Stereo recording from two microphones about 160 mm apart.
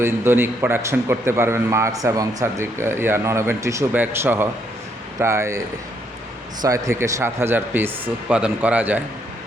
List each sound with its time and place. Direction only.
0.0 s a man's voice: 15° right (ahead or behind)